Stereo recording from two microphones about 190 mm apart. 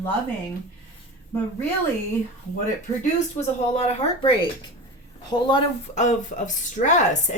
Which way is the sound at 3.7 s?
35° left (ahead or behind).